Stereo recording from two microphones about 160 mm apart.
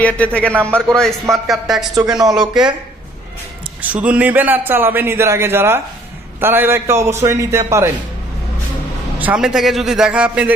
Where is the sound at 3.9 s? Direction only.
10° right (ahead or behind).